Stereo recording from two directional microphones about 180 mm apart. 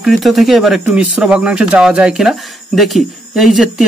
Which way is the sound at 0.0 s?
Centre (ahead or behind).